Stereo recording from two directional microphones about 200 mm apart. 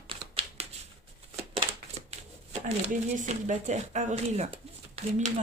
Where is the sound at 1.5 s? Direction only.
30° right (ahead or behind).